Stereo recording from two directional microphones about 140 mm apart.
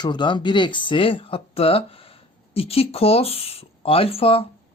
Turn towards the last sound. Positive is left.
turn(degrees=45)  # may be behind; listen again after turning